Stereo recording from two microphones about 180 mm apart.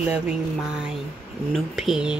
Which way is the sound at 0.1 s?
5° right (ahead or behind).